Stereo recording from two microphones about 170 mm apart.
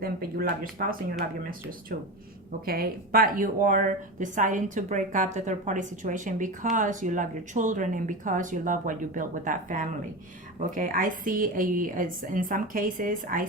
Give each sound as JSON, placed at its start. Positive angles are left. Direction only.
{"t": 0.0, "sound": "speech", "side_deg": -60}
{"t": 2.5, "sound": "speech", "side_deg": -60}